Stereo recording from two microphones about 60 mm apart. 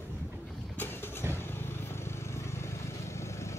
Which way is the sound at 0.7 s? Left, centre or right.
Left.